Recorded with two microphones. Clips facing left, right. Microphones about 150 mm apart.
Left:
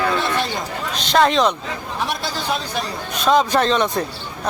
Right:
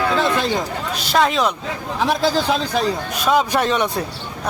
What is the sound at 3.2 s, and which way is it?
Speech, 10° right (ahead or behind).